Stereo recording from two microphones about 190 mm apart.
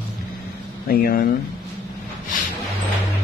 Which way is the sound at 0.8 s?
50° left (ahead or behind).